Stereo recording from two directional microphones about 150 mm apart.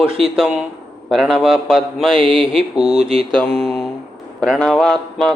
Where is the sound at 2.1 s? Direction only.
35° right (ahead or behind).